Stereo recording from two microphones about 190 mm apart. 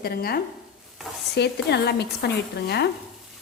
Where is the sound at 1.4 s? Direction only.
60° left (ahead or behind).